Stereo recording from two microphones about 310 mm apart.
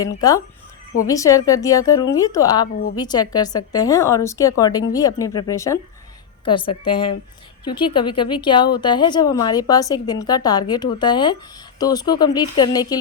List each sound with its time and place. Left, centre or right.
0.0 s a woman's voice: centre
6.8 s a woman's voice: centre